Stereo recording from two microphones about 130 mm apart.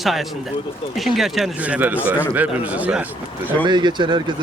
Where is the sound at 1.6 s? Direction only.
10° right (ahead or behind).